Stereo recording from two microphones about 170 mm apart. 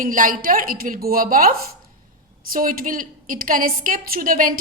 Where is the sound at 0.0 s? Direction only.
50° right (ahead or behind).